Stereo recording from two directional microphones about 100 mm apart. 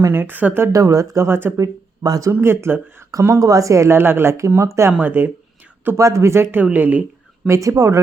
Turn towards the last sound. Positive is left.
turn(degrees=-30)  # may be behind; listen again after turning